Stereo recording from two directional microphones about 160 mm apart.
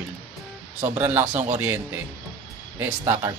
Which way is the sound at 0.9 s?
10° right (ahead or behind).